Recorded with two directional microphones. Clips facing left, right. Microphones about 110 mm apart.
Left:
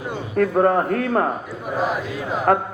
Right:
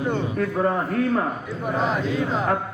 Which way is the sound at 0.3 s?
55° left (ahead or behind).